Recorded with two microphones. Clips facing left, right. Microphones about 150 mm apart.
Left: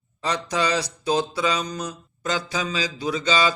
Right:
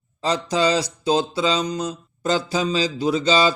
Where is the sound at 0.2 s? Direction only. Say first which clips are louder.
Right 4 dB; 30° right (ahead or behind).